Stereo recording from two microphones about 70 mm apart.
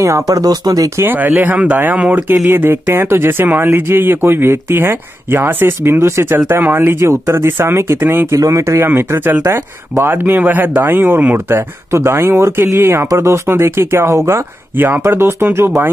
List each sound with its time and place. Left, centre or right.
0.0 s speech: right
1.0 s speech: right
8.4 s speech: right